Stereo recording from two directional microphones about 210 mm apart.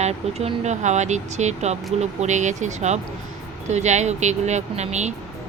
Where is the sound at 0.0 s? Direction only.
30° right (ahead or behind).